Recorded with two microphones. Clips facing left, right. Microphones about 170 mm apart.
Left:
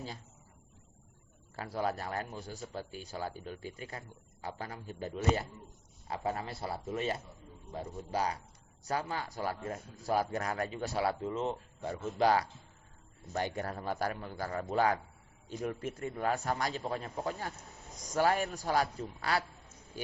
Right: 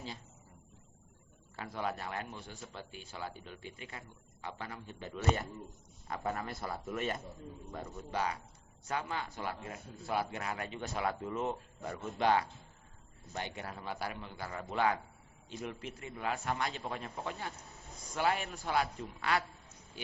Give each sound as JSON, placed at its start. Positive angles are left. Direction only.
{"t": 1.5, "sound": "a man's voice", "side_deg": 35}